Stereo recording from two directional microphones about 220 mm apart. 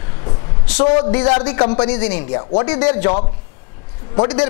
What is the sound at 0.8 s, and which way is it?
A man's voice, 20° left (ahead or behind).